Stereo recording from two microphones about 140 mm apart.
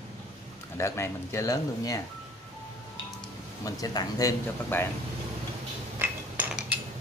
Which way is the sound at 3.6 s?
25° left (ahead or behind).